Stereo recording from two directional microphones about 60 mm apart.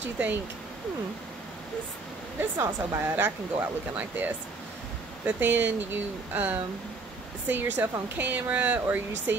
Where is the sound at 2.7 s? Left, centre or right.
Right.